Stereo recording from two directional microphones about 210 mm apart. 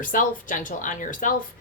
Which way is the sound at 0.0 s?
40° left (ahead or behind).